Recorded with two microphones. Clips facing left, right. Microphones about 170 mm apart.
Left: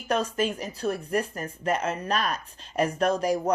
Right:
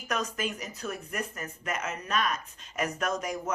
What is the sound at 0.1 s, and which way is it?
A woman's voice, 30° left (ahead or behind).